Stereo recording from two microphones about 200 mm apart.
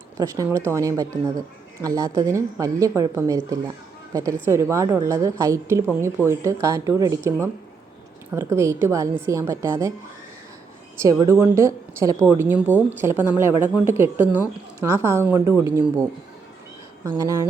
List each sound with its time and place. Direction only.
0.2 s a woman's voice: 15° right (ahead or behind)
11.0 s a woman's voice: 15° right (ahead or behind)
17.0 s a woman's voice: 15° right (ahead or behind)